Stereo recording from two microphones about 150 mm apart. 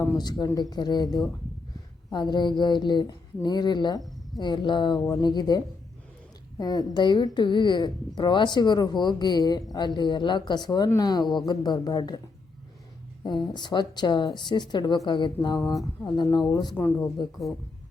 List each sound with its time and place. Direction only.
0.2 s a woman's voice: 25° left (ahead or behind)
13.2 s speech: 30° left (ahead or behind)